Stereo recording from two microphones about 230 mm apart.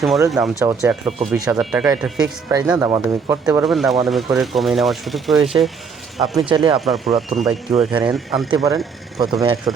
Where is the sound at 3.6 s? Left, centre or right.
Centre.